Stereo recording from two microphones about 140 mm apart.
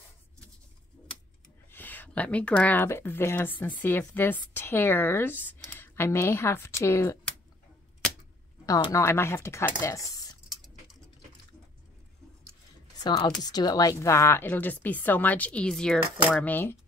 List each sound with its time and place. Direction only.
1.7 s speech: 15° left (ahead or behind)
8.6 s speech: 20° left (ahead or behind)
10.5 s pigeon: centre (ahead or behind)
13.4 s speech: 30° left (ahead or behind); by 16.7 s 15° left (ahead or behind)